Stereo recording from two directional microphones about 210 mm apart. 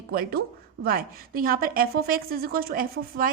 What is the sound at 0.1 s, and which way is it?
A woman's voice, 45° right (ahead or behind).